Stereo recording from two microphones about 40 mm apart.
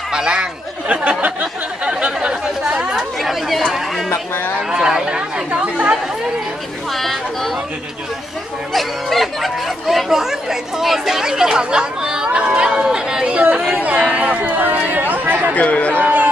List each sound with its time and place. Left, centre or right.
0.1 s speech: centre
1.2 s a sound: right
2.1 s chatter: right
3.0 s speech: centre
4.6 s speech: centre
5.0 s speech: right
6.9 s speech: centre
8.7 s speech: centre
13.3 s speech: right
14.4 s speech: right
15.5 s speech: left
16.0 s speech: right